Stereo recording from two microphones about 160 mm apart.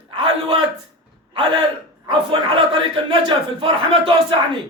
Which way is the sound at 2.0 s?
30° right (ahead or behind).